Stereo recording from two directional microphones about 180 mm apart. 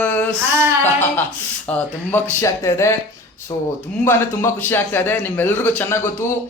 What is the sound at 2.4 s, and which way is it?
Speech, 15° left (ahead or behind).